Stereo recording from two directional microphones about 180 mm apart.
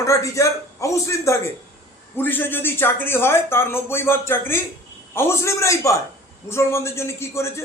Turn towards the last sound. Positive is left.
turn(degrees=15)  # may be behind; listen again after turning